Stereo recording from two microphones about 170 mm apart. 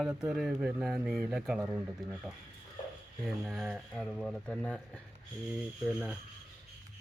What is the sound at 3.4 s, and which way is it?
Speech, 5° right (ahead or behind).